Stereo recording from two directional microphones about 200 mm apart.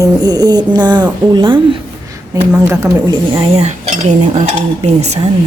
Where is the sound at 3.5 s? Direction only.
35° right (ahead or behind).